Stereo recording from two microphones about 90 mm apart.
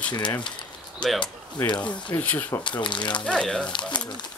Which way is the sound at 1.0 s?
10° left (ahead or behind).